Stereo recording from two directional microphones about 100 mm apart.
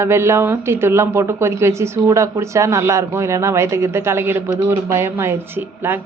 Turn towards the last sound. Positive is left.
turn(degrees=-20)  # may be behind; listen again after turning